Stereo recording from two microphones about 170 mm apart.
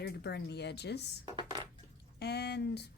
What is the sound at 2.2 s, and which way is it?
Speech, 75° left (ahead or behind).